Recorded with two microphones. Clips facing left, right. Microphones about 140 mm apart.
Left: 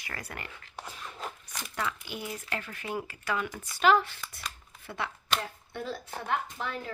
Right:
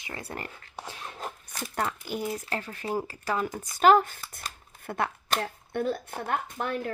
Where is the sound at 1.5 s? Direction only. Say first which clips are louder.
Right 4 dB; 45° right (ahead or behind).